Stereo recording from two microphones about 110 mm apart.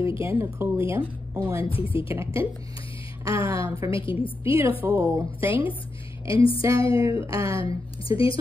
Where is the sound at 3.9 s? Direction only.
55° left (ahead or behind).